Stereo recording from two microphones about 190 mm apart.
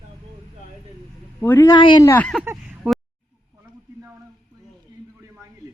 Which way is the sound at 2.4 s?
10° right (ahead or behind).